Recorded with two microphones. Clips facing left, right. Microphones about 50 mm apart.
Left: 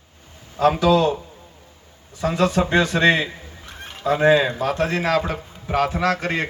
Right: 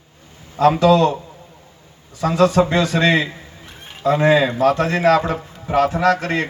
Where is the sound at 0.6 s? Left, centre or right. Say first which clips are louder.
Right 3 dB; centre.